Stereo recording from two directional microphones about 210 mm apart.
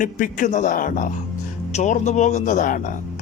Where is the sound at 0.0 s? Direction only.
40° left (ahead or behind).